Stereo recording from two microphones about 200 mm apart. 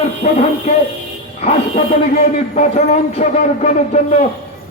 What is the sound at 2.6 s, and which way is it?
Speech, 35° left (ahead or behind).